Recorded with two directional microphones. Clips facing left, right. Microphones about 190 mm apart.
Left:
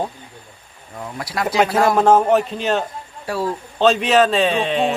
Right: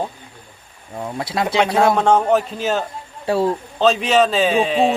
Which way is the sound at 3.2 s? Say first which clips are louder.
Right 5 dB; 25° right (ahead or behind).